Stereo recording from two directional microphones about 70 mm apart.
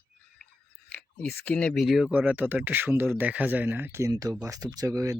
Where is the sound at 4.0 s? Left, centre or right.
Right.